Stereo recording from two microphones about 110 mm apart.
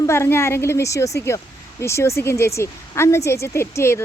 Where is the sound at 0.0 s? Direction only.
25° left (ahead or behind).